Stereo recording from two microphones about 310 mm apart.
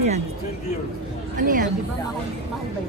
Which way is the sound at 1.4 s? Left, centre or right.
Right.